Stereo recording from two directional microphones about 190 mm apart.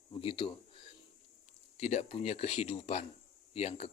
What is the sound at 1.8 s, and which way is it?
A man's voice, 35° left (ahead or behind).